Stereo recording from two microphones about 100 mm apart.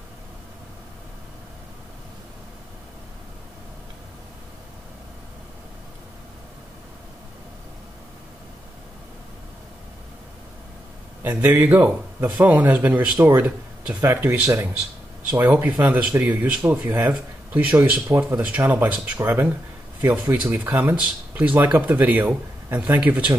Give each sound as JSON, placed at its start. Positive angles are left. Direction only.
{"t": 11.2, "sound": "speech", "side_deg": -20}
{"t": 14.0, "sound": "speech", "side_deg": -30}
{"t": 15.3, "sound": "speech", "side_deg": -20}
{"t": 18.0, "sound": "speech", "side_deg": -25}